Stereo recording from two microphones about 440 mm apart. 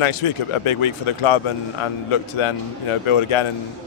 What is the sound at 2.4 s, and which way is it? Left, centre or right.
Speech, left.